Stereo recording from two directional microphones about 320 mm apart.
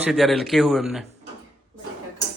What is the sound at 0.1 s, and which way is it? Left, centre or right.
Speech, centre.